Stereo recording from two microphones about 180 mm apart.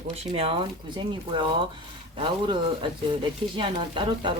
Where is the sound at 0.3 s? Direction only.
30° right (ahead or behind).